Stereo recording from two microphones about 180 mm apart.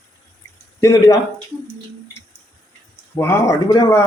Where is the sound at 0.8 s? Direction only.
15° left (ahead or behind).